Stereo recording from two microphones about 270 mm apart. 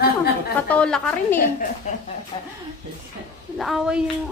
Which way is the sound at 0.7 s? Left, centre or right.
Centre.